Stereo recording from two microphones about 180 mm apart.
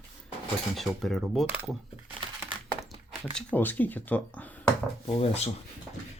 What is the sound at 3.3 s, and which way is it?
Speech, 10° left (ahead or behind).